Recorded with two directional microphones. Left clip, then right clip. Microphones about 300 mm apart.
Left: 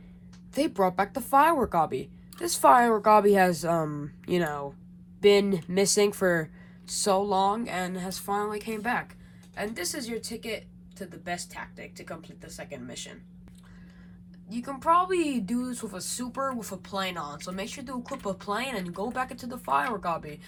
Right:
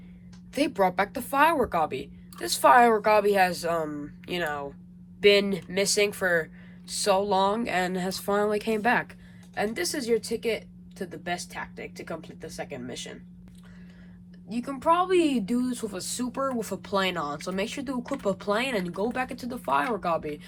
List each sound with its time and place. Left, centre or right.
0.5 s a woman's voice: centre
12.1 s a woman's voice: centre
14.9 s a woman's voice: centre